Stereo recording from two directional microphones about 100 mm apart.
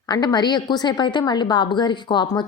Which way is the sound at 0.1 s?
45° left (ahead or behind).